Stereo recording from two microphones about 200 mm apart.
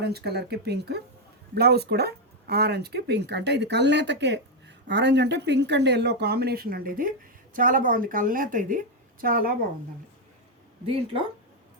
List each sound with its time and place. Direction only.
0.0 s a woman's voice: 55° right (ahead or behind)